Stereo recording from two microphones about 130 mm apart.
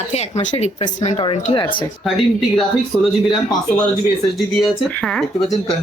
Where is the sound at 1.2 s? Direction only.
45° left (ahead or behind).